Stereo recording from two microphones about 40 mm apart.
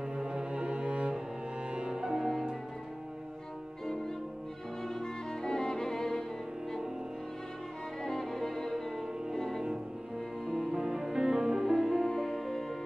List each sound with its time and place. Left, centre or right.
0.2 s cello: right
3.8 s music: centre
4.8 s violin: centre
8.0 s music: centre
10.4 s music: centre
12.1 s music: centre